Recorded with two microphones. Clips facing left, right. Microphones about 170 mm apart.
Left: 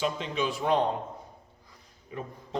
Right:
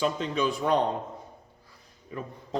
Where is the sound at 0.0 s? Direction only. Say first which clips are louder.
Right 3 dB; 40° right (ahead or behind).